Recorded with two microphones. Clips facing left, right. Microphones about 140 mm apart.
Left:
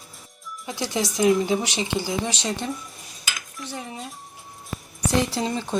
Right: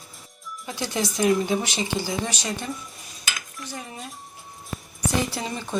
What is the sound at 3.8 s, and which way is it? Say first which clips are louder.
Music: left 3 dB; 20° left (ahead or behind).